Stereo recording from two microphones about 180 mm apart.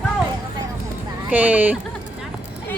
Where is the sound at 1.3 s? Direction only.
10° right (ahead or behind).